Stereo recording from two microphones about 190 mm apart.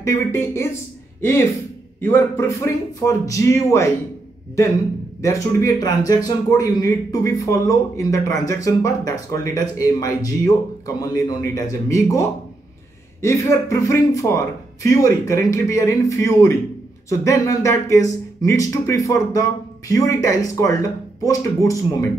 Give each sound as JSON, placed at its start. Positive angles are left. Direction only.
{"t": 0.0, "sound": "speech", "side_deg": 15}
{"t": 2.0, "sound": "speech", "side_deg": 10}
{"t": 5.2, "sound": "speech", "side_deg": 15}